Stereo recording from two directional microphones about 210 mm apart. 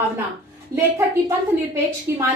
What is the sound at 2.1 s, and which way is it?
Speech, 10° right (ahead or behind).